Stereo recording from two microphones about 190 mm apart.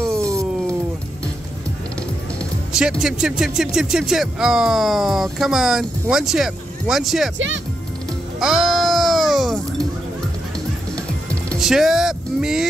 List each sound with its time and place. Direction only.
0.2 s music: 15° right (ahead or behind)
2.7 s speech: 5° right (ahead or behind)
7.3 s speech: 80° right
8.4 s a sound: centre (ahead or behind)
11.2 s speech: centre (ahead or behind)